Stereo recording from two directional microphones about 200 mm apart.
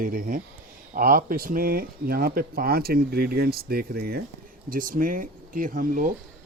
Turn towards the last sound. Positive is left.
turn(degrees=-40)  # may be behind; listen again after turning